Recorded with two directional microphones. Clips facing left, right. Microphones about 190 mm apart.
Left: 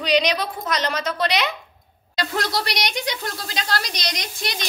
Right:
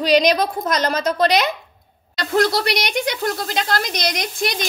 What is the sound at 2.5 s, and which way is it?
A woman's voice, 55° right (ahead or behind).